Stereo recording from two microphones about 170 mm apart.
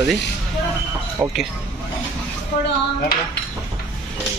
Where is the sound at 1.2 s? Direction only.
15° right (ahead or behind).